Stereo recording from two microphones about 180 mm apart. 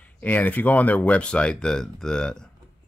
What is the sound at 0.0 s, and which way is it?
Speech, 10° left (ahead or behind).